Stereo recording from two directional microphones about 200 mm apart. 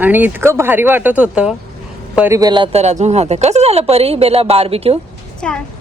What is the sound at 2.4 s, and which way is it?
Speech, 20° right (ahead or behind).